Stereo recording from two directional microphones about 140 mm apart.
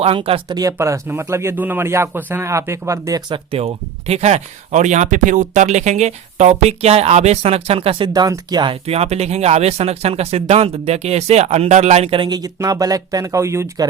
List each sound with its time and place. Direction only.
0.0 s speech: 40° right (ahead or behind)
0.5 s speech: 25° right (ahead or behind)